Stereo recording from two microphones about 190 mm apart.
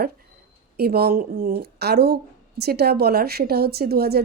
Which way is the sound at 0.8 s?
55° right (ahead or behind).